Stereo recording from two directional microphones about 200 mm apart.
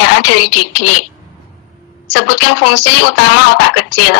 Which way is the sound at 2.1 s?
55° left (ahead or behind).